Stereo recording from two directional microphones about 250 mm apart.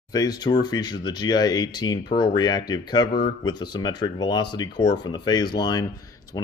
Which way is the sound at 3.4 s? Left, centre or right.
Centre.